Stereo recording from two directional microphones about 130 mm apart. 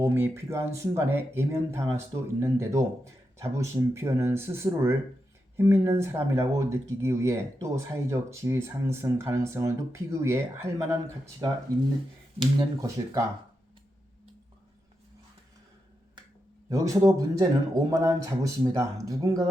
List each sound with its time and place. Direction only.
0.0 s speech: 20° right (ahead or behind)
12.4 s speech: 30° right (ahead or behind)
16.6 s speech: 25° right (ahead or behind)